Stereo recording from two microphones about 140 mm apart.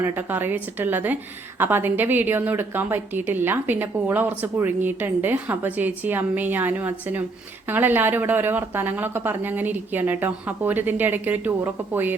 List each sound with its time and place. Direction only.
0.0 s a woman's voice: 15° right (ahead or behind)